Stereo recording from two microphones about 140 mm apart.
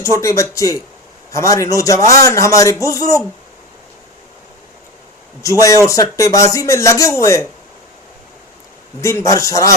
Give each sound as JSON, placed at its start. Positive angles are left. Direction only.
{"t": 0.0, "sound": "speech", "side_deg": 20}
{"t": 5.4, "sound": "speech", "side_deg": 25}
{"t": 9.0, "sound": "speech", "side_deg": 20}